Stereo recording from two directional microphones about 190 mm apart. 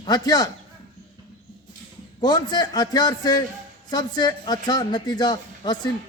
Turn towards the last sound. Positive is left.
turn(degrees=20)  # may be behind; listen again after turning